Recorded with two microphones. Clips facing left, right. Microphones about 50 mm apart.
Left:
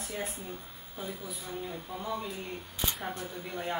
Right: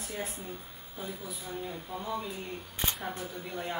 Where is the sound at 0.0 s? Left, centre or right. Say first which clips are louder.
Left 1 dB; centre.